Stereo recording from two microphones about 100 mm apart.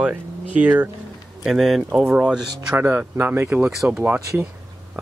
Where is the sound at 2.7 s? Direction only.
20° right (ahead or behind).